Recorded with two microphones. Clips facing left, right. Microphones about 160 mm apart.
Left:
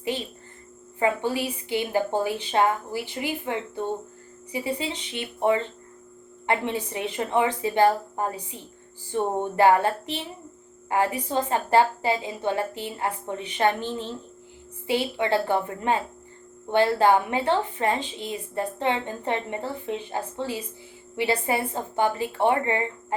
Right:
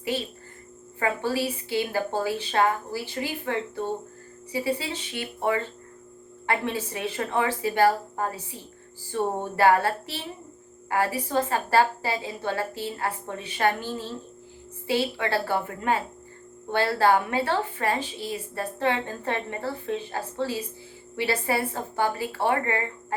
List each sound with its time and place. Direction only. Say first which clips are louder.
0.0 s a woman's voice: even; 20° left (ahead or behind)